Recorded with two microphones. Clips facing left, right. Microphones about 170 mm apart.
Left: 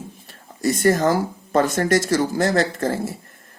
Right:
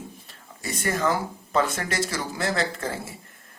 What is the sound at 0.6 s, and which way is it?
Speech, 40° left (ahead or behind).